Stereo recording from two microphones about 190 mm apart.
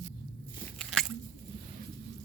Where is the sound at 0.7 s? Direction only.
Centre (ahead or behind).